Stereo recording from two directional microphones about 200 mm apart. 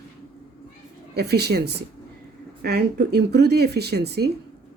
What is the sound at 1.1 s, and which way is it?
Speech, 55° right (ahead or behind).